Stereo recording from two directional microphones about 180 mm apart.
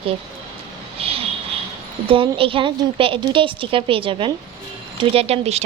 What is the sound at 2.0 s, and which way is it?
A woman's voice, 30° right (ahead or behind).